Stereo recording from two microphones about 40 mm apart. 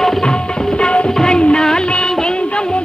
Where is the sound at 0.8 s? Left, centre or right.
Left.